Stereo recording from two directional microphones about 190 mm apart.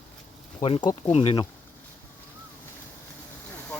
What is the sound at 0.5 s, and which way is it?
Speech, 30° left (ahead or behind).